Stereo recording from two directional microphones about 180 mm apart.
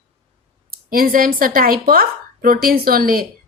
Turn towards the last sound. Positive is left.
turn(degrees=-55)  # may be behind; listen again after turning